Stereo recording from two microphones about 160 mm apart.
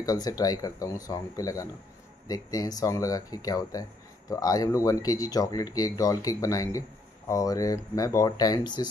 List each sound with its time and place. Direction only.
0.0 s speech: 25° left (ahead or behind)